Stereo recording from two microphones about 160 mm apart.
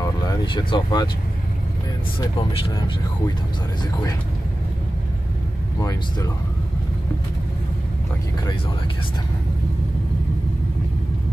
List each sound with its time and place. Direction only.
0.0 s speech: 20° left (ahead or behind)
5.8 s speech: 20° left (ahead or behind)